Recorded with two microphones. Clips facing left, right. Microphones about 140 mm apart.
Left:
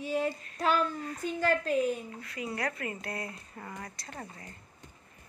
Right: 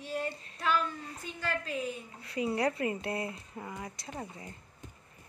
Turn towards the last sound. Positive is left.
turn(degrees=-15)  # may be behind; listen again after turning